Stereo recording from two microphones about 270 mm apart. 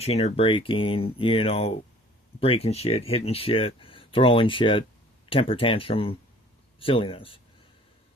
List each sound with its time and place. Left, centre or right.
0.0 s speech: left